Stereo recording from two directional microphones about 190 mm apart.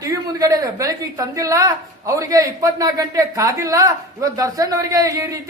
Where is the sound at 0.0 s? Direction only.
20° right (ahead or behind).